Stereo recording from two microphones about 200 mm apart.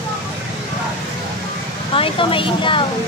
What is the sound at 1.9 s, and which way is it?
Speech, 25° left (ahead or behind).